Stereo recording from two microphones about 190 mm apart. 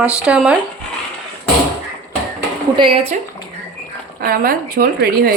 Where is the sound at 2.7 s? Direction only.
25° right (ahead or behind).